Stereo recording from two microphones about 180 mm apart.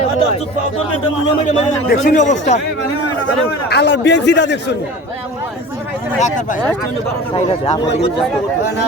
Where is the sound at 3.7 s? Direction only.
70° left (ahead or behind).